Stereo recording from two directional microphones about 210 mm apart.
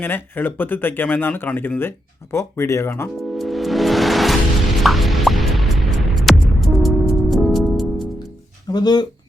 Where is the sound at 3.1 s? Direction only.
Centre (ahead or behind).